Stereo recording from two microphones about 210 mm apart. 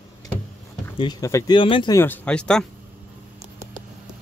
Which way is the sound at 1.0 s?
20° left (ahead or behind).